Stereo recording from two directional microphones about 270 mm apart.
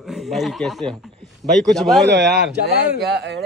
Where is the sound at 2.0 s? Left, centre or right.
Right.